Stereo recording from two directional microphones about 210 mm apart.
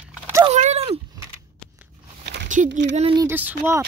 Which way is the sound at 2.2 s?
55° right (ahead or behind).